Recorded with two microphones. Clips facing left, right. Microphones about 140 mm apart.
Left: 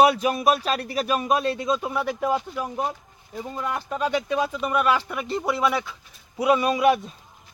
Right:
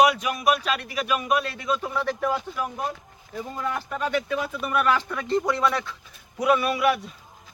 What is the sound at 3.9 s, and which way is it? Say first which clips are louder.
Speech: left 3 dB; 15° left (ahead or behind).